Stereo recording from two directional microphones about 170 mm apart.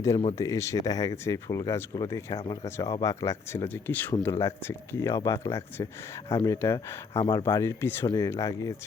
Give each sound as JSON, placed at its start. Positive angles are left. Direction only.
{"t": 0.3, "sound": "speech", "side_deg": 20}
{"t": 7.1, "sound": "speech", "side_deg": 30}
{"t": 7.5, "sound": "speech", "side_deg": 15}